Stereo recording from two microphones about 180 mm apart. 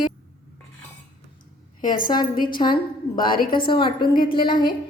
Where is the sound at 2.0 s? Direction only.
25° left (ahead or behind).